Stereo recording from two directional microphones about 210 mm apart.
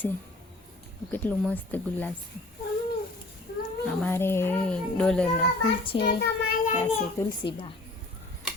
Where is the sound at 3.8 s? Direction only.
10° left (ahead or behind).